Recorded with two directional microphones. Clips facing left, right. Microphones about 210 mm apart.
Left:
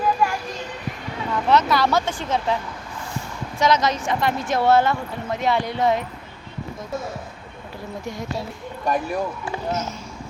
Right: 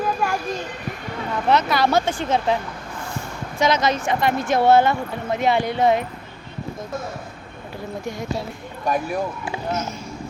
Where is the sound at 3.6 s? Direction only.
55° right (ahead or behind).